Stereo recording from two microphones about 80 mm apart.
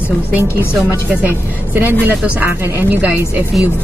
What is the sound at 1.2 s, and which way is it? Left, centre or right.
Speech, right.